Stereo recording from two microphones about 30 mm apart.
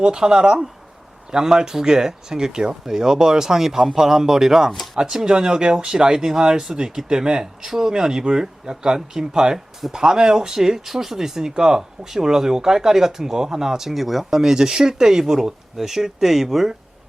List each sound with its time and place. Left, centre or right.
0.0 s speech: right; by 11.3 s centre
11.3 s speech: right; by 14.3 s centre
14.3 s speech: centre